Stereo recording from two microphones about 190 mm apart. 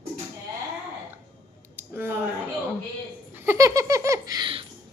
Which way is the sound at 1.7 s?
10° right (ahead or behind).